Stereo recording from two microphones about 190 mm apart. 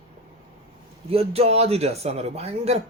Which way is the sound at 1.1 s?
30° right (ahead or behind).